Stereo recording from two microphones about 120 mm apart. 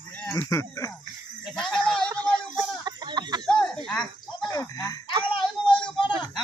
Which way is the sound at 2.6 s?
35° right (ahead or behind).